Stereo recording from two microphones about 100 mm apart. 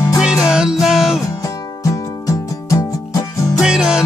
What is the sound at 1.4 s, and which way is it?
Music, 35° left (ahead or behind).